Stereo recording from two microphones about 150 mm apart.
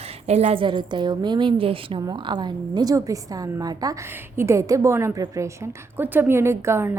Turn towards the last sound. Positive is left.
turn(degrees=-15)  # may be behind; listen again after turning